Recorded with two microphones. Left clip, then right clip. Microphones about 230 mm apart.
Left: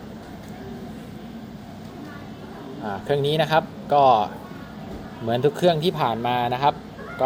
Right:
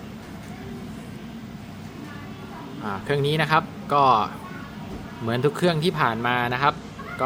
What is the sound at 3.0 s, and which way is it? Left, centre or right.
Speech, centre.